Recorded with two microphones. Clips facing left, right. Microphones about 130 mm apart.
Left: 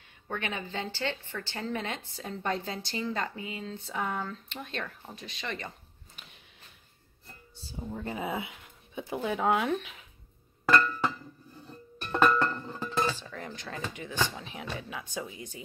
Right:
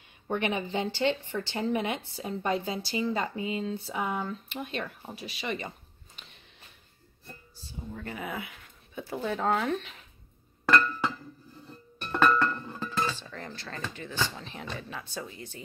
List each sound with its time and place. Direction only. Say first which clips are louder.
0.3 s speech: right 6 dB; 20° right (ahead or behind)
3.7 s speech: right 2 dB; 10° right (ahead or behind)
6.2 s a sound: even; 5° left (ahead or behind)
7.5 s speech: left 3 dB; 25° left (ahead or behind); by 10.0 s 5° left (ahead or behind)
12.4 s music: right 1 dB; 20° left (ahead or behind)
13.2 s speech: left 1 dB; 5° left (ahead or behind)